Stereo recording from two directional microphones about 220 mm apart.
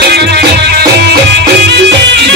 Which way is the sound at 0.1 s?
50° right (ahead or behind).